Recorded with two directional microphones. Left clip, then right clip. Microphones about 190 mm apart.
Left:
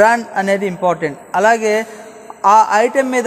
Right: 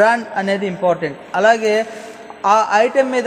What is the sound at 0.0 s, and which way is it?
A man's voice, 35° left (ahead or behind).